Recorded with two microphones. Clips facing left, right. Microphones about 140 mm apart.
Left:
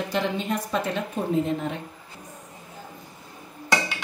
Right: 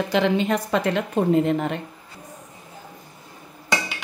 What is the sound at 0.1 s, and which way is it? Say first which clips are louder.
Speech: right 7 dB; 90° right.